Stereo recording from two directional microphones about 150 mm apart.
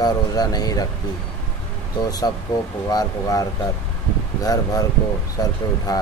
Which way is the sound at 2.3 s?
25° left (ahead or behind).